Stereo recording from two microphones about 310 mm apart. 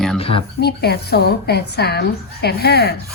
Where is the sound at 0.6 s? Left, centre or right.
Left.